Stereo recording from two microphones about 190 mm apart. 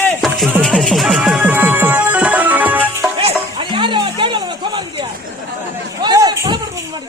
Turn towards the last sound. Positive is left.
turn(degrees=-20)  # may be behind; listen again after turning